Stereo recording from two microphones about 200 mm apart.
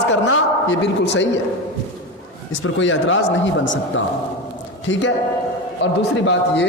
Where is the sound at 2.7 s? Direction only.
70° left (ahead or behind).